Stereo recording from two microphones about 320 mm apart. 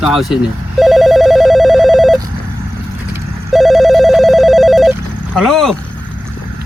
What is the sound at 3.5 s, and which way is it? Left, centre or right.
Telephone, centre.